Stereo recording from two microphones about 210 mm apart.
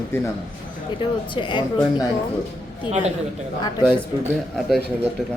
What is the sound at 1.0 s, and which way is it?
A woman's voice, 25° left (ahead or behind).